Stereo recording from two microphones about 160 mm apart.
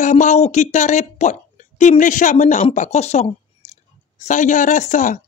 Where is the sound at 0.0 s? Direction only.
50° left (ahead or behind).